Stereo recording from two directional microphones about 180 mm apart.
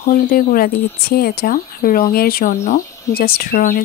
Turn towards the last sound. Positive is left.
turn(degrees=55)  # may be behind; listen again after turning